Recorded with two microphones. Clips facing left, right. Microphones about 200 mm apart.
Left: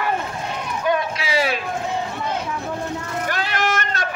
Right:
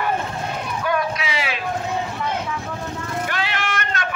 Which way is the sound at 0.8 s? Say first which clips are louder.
Left 2 dB; 25° left (ahead or behind).